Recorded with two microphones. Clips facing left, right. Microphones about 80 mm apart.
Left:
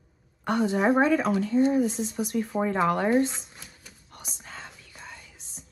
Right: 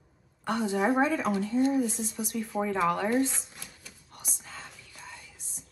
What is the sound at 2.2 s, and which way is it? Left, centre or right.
Speech, left.